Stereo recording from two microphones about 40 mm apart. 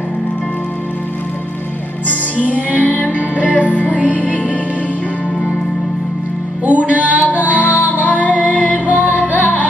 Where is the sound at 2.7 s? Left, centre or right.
Left.